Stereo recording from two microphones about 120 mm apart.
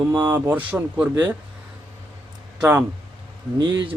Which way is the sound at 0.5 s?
15° right (ahead or behind).